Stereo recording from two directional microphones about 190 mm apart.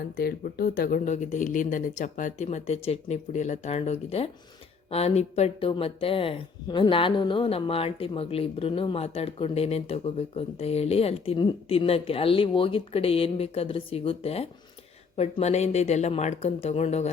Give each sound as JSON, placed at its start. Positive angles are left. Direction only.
{"t": 0.2, "sound": "speech", "side_deg": 55}